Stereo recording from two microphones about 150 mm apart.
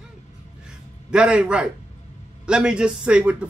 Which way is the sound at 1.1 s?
5° right (ahead or behind).